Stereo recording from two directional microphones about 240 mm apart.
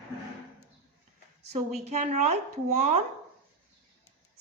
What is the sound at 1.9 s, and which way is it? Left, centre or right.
A woman's voice, right.